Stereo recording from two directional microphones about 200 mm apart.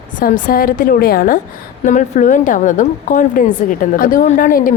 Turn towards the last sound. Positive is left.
turn(degrees=45)  # may be behind; listen again after turning